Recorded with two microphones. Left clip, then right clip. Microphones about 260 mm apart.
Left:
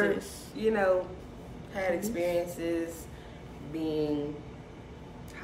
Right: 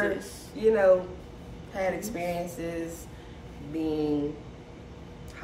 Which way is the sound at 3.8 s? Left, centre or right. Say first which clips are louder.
Right 2 dB; centre.